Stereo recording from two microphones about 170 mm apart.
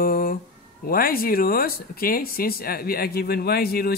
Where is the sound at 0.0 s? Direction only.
60° left (ahead or behind).